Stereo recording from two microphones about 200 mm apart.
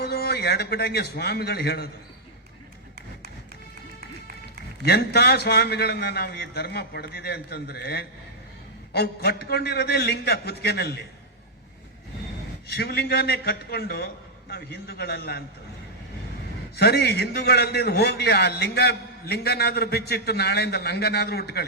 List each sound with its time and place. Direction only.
0.0 s a man's voice: 50° left (ahead or behind)
4.8 s a man's voice: 55° left (ahead or behind)
12.6 s a man's voice: 55° left (ahead or behind)
16.7 s a man's voice: 55° left (ahead or behind)